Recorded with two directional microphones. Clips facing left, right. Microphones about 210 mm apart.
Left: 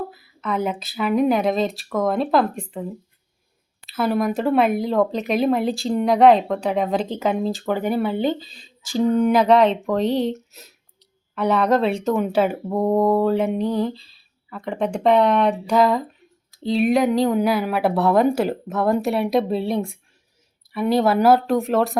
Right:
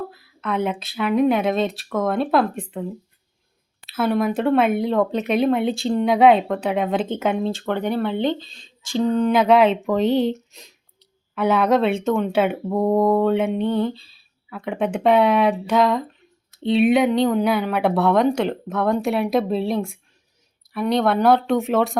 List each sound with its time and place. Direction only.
0.1 s speech: centre (ahead or behind)
3.8 s speech: centre (ahead or behind)
9.4 s speech: 5° right (ahead or behind)